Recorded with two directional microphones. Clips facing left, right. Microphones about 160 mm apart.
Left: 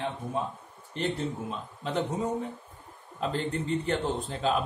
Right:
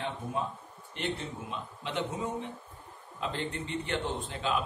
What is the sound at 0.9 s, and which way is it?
A man's voice, 40° left (ahead or behind).